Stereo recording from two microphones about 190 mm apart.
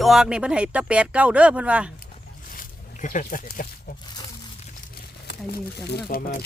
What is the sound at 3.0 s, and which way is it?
Speech, 40° left (ahead or behind).